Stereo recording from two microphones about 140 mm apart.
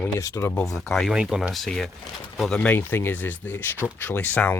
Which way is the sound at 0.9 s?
5° right (ahead or behind).